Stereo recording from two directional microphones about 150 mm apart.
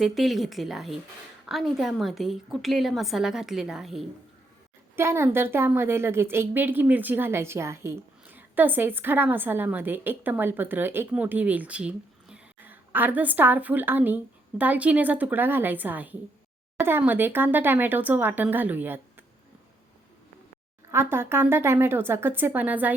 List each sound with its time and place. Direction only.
0.0 s a woman's voice: centre (ahead or behind)
4.9 s a woman's voice: 15° right (ahead or behind)
20.9 s a woman's voice: 15° right (ahead or behind)